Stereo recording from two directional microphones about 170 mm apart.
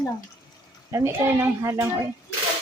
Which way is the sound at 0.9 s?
15° right (ahead or behind).